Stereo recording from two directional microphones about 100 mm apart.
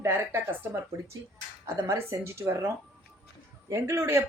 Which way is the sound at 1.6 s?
25° right (ahead or behind).